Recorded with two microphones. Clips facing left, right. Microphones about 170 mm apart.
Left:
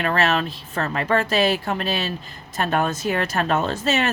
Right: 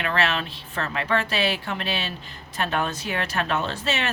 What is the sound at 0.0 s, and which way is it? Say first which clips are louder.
A woman's voice: left 4 dB; 40° left (ahead or behind).